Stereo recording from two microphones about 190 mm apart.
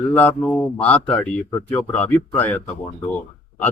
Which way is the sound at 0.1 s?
10° left (ahead or behind).